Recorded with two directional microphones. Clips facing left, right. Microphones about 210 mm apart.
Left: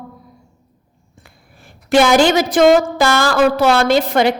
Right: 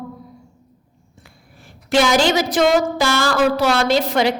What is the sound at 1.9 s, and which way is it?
A woman's voice, 55° left (ahead or behind).